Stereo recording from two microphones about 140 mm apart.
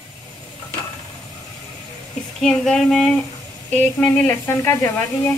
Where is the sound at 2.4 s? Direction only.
5° left (ahead or behind).